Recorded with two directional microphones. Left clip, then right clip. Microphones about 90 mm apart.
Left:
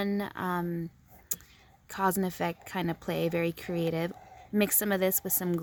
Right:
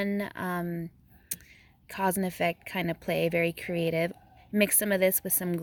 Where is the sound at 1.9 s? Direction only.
40° left (ahead or behind).